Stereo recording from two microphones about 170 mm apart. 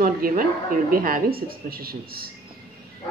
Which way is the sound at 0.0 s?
55° right (ahead or behind).